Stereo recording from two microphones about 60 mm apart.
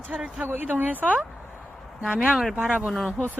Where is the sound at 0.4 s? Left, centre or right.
Right.